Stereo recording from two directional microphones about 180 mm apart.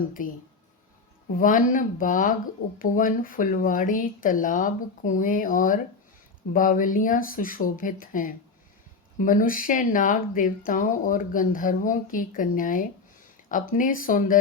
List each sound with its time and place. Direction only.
0.2 s speech: 50° left (ahead or behind)
1.4 s speech: 50° left (ahead or behind)